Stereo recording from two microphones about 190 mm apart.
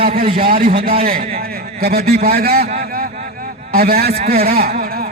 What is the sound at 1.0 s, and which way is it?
A man's voice, 50° right (ahead or behind).